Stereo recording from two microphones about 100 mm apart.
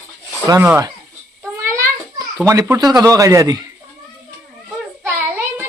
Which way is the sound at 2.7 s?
40° right (ahead or behind).